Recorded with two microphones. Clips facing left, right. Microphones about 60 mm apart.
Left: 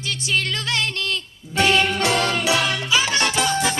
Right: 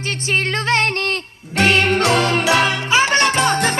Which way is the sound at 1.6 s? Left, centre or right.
Right.